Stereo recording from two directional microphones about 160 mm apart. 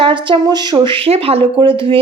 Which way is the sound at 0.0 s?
30° right (ahead or behind).